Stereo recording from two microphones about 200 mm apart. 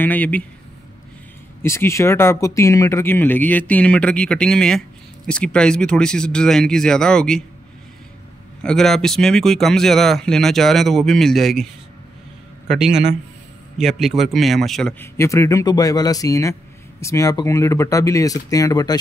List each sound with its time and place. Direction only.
0.0 s a man's voice: 10° left (ahead or behind)
1.6 s speech: 15° left (ahead or behind)
8.6 s speech: centre (ahead or behind)
12.7 s a man's voice: centre (ahead or behind); by 18.9 s 20° left (ahead or behind)